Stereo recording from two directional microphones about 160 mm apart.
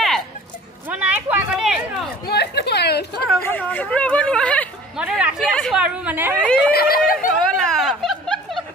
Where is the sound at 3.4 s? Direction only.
10° left (ahead or behind).